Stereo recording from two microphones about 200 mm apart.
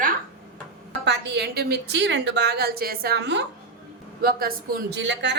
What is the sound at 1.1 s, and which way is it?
A woman's voice, 60° right (ahead or behind).